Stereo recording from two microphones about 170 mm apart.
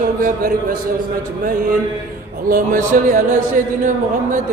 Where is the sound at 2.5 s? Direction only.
55° right (ahead or behind).